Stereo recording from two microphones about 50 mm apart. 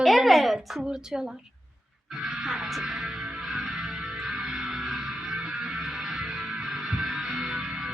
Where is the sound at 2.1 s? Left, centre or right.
Centre.